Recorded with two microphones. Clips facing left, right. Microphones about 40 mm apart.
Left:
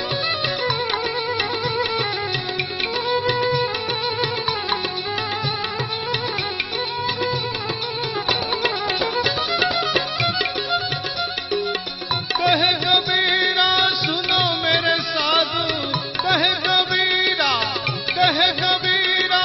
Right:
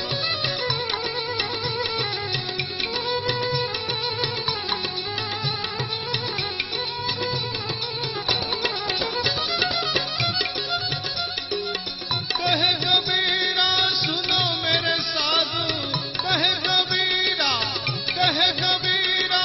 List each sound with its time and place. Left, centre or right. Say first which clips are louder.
3.1 s music: left 6 dB; centre
8.3 s music: left 3 dB; centre
12.4 s music: left 5 dB; centre
13.2 s music: left 4 dB; left; by 17.2 s centre
17.2 s music: left 4 dB; centre